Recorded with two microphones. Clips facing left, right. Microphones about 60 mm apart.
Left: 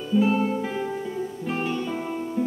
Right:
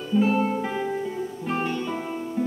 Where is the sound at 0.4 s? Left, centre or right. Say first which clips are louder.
Right 1 dB; right.